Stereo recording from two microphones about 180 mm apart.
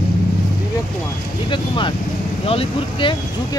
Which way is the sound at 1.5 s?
25° left (ahead or behind).